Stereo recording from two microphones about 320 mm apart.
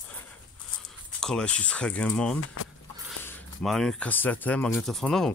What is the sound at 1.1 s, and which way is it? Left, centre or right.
Speech, centre.